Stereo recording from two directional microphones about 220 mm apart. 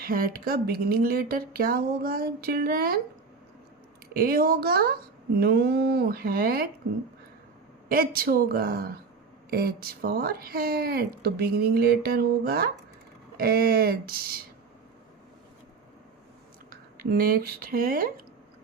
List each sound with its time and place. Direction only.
0.0 s speech: 40° right (ahead or behind)
4.1 s speech: 40° right (ahead or behind)
7.9 s speech: 40° right (ahead or behind)
17.0 s speech: 45° right (ahead or behind)